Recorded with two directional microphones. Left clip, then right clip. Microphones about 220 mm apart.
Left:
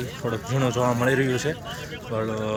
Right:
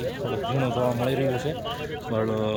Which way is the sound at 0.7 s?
Centre (ahead or behind).